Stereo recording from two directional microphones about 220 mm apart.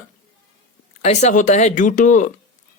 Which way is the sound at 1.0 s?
35° left (ahead or behind).